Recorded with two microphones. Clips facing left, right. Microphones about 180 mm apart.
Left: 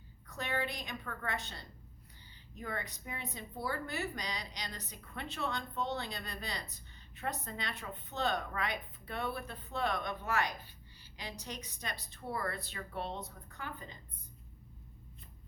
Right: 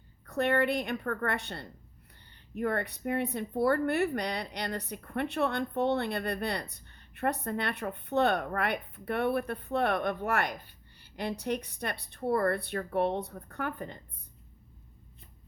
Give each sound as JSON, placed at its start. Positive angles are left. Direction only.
{"t": 0.3, "sound": "a woman's voice", "side_deg": -60}